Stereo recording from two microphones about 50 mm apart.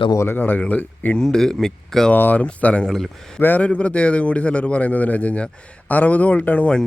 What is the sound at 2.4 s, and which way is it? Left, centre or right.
Speech, left.